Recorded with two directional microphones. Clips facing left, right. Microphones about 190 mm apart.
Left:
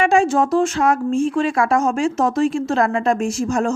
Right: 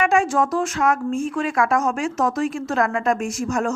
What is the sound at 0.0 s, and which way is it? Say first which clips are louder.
Speech: left 3 dB; 30° left (ahead or behind).